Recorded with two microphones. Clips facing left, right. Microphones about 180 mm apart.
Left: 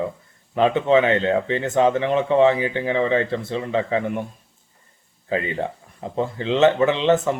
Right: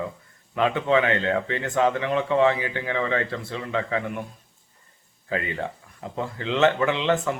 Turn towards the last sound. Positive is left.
turn(degrees=25)  # may be behind; listen again after turning